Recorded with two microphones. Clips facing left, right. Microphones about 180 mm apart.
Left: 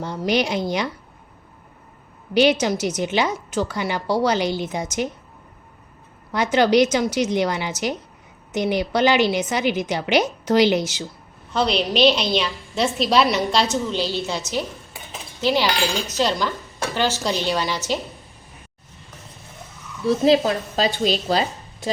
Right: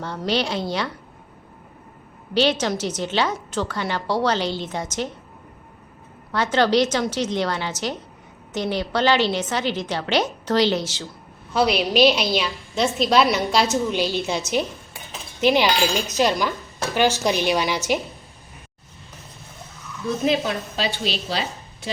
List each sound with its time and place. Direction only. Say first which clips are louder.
0.0 s a woman's voice: left 2 dB; 15° left (ahead or behind)
2.3 s a woman's voice: left 3 dB; 15° left (ahead or behind)
6.3 s a woman's voice: left 2 dB; 15° left (ahead or behind)
11.5 s a woman's voice: right 1 dB; 5° right (ahead or behind)
13.8 s speech: right 1 dB; 15° right (ahead or behind)
20.1 s a woman's voice: left 5 dB; 30° left (ahead or behind)